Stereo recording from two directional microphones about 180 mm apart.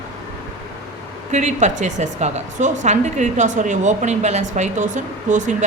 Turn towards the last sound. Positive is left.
turn(degrees=-45)  # may be behind; listen again after turning